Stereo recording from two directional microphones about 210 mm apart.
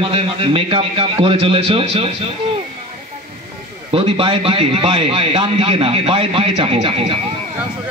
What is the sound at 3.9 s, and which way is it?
Speech, 25° right (ahead or behind).